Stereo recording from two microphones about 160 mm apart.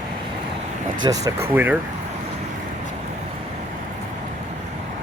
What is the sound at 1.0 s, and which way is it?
Speech, 20° right (ahead or behind).